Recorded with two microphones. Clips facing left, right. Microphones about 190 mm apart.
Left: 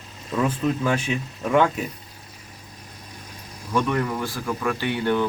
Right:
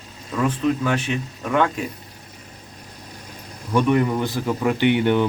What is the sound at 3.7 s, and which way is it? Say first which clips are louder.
Speech: right 5 dB; 15° right (ahead or behind).